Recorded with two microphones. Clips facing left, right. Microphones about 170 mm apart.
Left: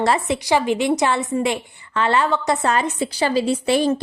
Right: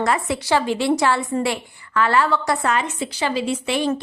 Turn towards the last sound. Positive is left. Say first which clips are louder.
# left 4 dB
turn(degrees=35)  # may be behind; listen again after turning